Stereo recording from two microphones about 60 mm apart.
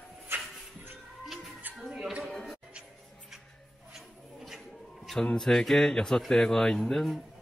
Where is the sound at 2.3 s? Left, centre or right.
Centre.